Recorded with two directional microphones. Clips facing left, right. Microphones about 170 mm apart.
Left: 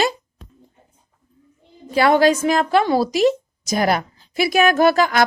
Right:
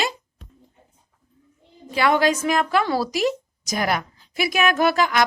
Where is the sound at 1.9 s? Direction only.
35° left (ahead or behind).